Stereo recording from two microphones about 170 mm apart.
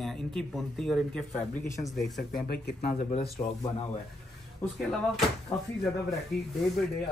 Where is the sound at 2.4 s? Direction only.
65° left (ahead or behind).